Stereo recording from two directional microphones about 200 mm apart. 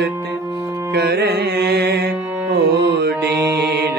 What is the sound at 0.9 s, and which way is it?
Music, 55° right (ahead or behind).